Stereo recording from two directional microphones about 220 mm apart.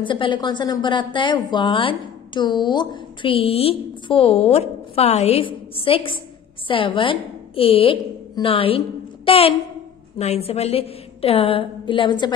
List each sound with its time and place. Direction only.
0.0 s a woman's voice: 20° left (ahead or behind)